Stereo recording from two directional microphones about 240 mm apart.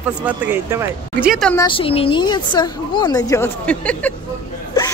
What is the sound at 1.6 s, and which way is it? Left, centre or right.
A woman's voice, left.